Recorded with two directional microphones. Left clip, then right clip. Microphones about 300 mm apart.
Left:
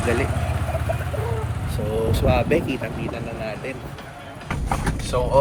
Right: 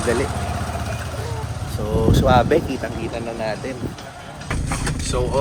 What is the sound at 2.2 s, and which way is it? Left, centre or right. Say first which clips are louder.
Speech: right 6 dB; centre.